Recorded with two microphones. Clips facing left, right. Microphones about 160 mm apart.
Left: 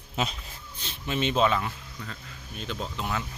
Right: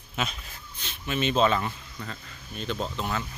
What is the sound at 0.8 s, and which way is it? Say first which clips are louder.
Speech: even; 25° left (ahead or behind).